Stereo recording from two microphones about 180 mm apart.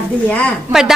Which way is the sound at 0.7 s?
5° right (ahead or behind).